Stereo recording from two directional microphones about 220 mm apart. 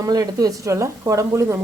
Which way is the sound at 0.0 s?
15° right (ahead or behind).